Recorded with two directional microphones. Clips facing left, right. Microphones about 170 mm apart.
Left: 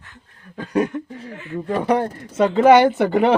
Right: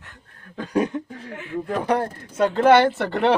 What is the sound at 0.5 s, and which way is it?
Speech, 10° left (ahead or behind).